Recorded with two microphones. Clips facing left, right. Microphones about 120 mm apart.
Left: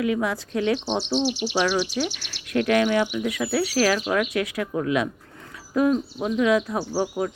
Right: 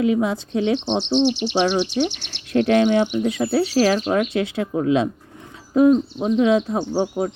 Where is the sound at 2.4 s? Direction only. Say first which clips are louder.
Right 4 dB; 30° right (ahead or behind).